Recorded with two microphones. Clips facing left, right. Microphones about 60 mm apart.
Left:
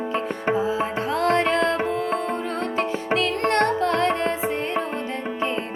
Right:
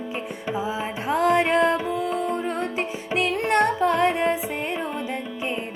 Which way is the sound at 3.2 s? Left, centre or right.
Centre.